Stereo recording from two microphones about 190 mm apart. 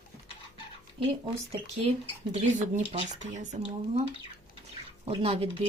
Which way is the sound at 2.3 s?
40° right (ahead or behind).